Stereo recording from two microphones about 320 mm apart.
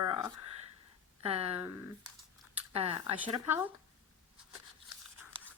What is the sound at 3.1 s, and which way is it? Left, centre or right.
Speech, centre.